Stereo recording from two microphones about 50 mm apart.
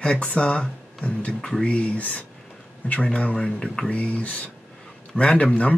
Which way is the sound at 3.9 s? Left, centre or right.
Left.